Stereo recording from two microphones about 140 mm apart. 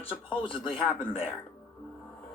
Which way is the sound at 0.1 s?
40° left (ahead or behind).